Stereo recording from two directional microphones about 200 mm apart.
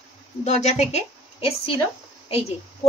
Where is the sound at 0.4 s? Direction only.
35° left (ahead or behind).